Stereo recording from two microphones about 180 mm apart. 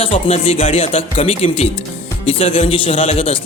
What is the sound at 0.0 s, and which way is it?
Speech, 35° left (ahead or behind).